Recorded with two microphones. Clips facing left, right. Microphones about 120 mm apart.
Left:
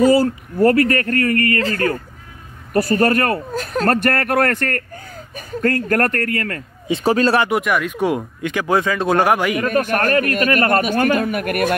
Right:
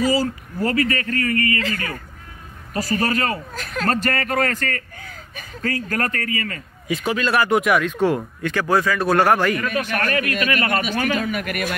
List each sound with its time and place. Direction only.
0.0 s speech: 55° left (ahead or behind)
1.6 s a man's voice: 45° left (ahead or behind)
2.7 s speech: 55° left (ahead or behind)
3.5 s speech: 40° left (ahead or behind)
3.9 s speech: 60° left (ahead or behind)
4.9 s a sound: 40° left (ahead or behind)
5.6 s speech: 60° left (ahead or behind)
6.9 s speech: 35° left (ahead or behind)
7.4 s speech: centre (ahead or behind)
7.9 s speech: 15° left (ahead or behind)
9.7 s a man's voice: 45° left (ahead or behind)